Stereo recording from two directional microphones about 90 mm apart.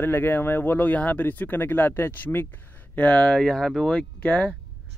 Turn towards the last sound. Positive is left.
turn(degrees=10)  # may be behind; listen again after turning